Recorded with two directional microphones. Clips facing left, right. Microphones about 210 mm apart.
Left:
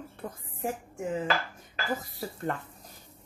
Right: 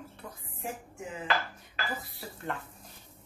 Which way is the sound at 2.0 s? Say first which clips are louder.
Left 7 dB; 40° left (ahead or behind).